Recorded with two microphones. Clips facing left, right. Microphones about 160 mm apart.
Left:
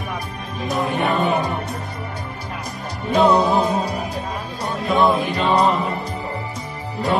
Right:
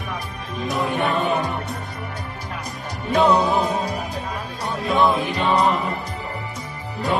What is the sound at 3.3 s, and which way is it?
Music, 20° left (ahead or behind).